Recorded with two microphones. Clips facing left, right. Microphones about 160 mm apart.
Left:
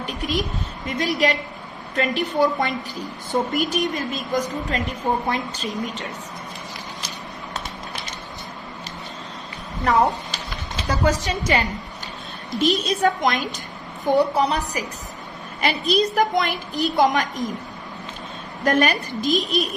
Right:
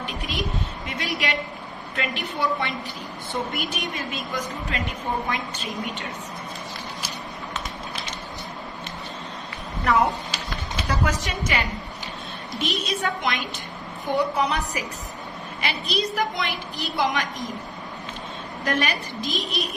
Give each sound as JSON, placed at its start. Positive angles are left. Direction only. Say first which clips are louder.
{"t": 0.0, "sound": "a woman's voice", "louder": "left 4 dB", "side_deg": 40}
{"t": 9.8, "sound": "a woman's voice", "louder": "left 2 dB", "side_deg": 35}
{"t": 15.9, "sound": "a woman's voice", "louder": "left 7 dB", "side_deg": 45}
{"t": 18.6, "sound": "a woman's voice", "louder": "left 6 dB", "side_deg": 45}